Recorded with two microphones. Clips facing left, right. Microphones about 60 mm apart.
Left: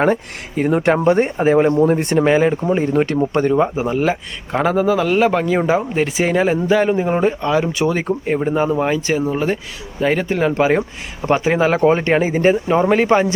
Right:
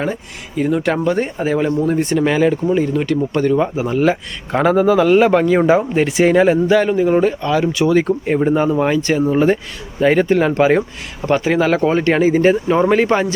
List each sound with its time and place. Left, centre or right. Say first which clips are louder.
0.0 s speech: left 6 dB; left
0.8 s speech: left 2 dB; left
1.0 s speech: left 3 dB; left
2.2 s speech: even; left
3.8 s speech: right 2 dB; centre
4.5 s speech: right 3 dB; centre
8.3 s speech: right 1 dB; centre
9.2 s speech: right 5 dB; centre
11.3 s speech: right 1 dB; centre